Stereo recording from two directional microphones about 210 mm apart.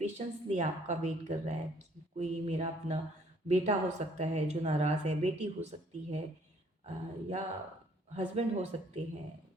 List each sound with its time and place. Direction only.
0.0 s a woman's voice: 30° right (ahead or behind)